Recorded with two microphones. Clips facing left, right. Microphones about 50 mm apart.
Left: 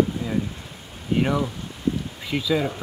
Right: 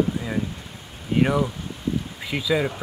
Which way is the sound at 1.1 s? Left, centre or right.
Centre.